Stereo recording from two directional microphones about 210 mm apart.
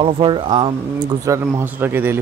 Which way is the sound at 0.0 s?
25° right (ahead or behind).